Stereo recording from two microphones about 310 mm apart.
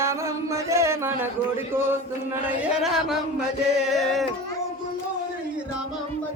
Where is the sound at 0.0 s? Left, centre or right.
Centre.